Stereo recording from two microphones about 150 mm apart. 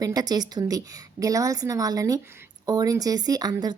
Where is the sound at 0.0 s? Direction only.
25° right (ahead or behind).